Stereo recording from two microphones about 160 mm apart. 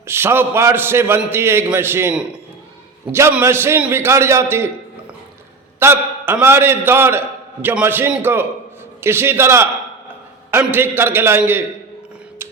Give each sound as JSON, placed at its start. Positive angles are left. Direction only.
{"t": 0.0, "sound": "a man's voice", "side_deg": -15}
{"t": 5.8, "sound": "a man's voice", "side_deg": -15}